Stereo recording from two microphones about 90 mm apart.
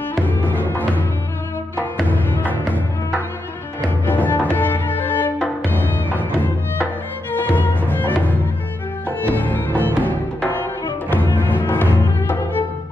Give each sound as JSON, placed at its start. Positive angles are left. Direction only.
{"t": 0.2, "sound": "music", "side_deg": 20}
{"t": 2.0, "sound": "music", "side_deg": 20}
{"t": 4.0, "sound": "music", "side_deg": 20}